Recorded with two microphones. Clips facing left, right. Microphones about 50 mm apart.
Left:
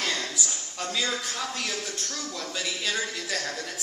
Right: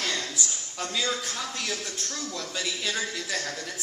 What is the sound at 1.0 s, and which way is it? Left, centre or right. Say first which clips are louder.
A woman's voice: even; left.